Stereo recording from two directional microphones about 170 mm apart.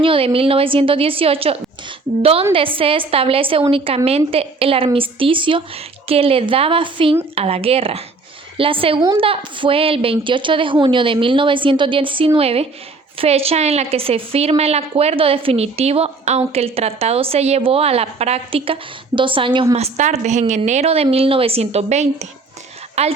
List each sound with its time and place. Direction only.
0.0 s a woman's voice: 30° right (ahead or behind)
19.7 s a woman's voice: 40° right (ahead or behind)